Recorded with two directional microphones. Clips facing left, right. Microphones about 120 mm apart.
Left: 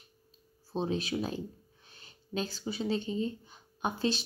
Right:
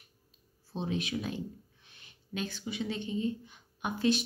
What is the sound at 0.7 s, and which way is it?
Speech, 35° left (ahead or behind).